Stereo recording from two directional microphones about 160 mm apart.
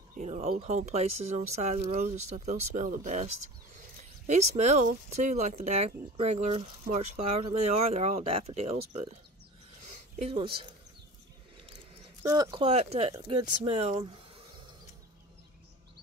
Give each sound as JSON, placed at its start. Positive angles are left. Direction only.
{"t": 0.1, "sound": "speech", "side_deg": -45}
{"t": 4.3, "sound": "speech", "side_deg": -45}
{"t": 9.9, "sound": "a sound", "side_deg": -45}
{"t": 10.3, "sound": "speech", "side_deg": -30}
{"t": 12.2, "sound": "speech", "side_deg": -20}